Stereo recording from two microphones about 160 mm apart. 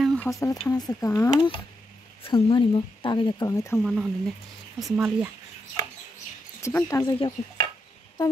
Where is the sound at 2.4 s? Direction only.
35° left (ahead or behind); by 3.7 s 20° left (ahead or behind).